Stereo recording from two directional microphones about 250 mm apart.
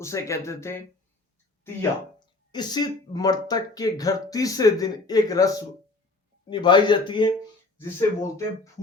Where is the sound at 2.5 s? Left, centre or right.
Centre.